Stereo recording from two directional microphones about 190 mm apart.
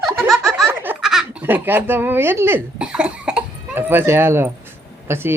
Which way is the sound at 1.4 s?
10° right (ahead or behind).